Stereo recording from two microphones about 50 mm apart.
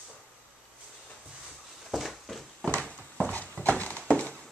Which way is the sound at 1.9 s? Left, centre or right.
Centre.